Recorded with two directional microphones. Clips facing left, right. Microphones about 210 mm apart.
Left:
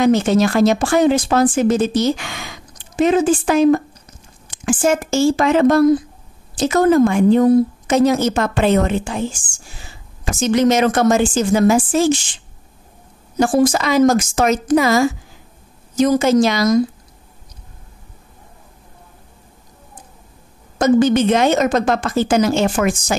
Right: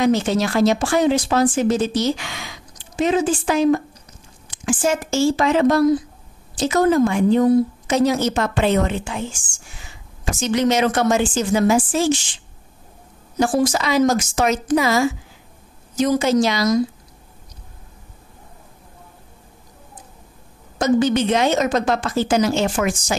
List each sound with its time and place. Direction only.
0.0 s speech: 50° left (ahead or behind); by 9.9 s 35° left (ahead or behind)
10.4 s speech: 45° left (ahead or behind)
13.4 s speech: 50° left (ahead or behind)
20.8 s speech: 50° left (ahead or behind)